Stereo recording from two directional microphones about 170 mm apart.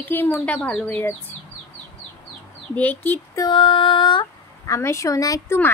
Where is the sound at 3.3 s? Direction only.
25° left (ahead or behind).